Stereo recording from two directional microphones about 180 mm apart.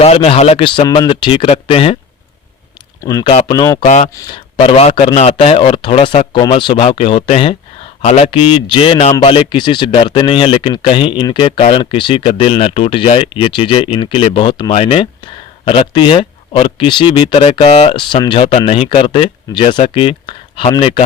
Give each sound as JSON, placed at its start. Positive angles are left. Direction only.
{"t": 0.0, "sound": "speech", "side_deg": 35}
{"t": 3.0, "sound": "speech", "side_deg": 20}
{"t": 3.2, "sound": "a man's voice", "side_deg": 30}
{"t": 3.8, "sound": "a man's voice", "side_deg": 40}
{"t": 4.1, "sound": "speech", "side_deg": 20}
{"t": 4.5, "sound": "a man's voice", "side_deg": 30}